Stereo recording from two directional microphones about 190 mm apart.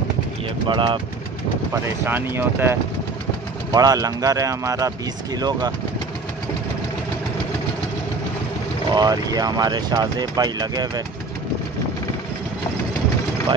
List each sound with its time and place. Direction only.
0.7 s speech: 25° right (ahead or behind)
1.7 s speech: 10° right (ahead or behind)
8.9 s speech: 20° right (ahead or behind)